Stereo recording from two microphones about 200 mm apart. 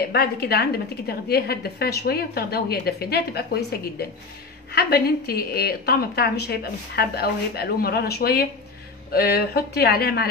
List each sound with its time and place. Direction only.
0.1 s a woman's voice: 50° left (ahead or behind)
4.7 s a woman's voice: 50° left (ahead or behind)